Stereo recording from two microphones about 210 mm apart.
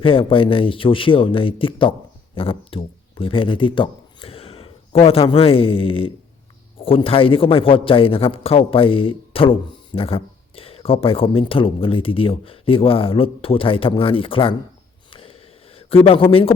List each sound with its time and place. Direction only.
0.0 s a man's voice: 25° left (ahead or behind)
15.1 s a sound: 25° left (ahead or behind)
16.0 s a man's voice: 25° left (ahead or behind)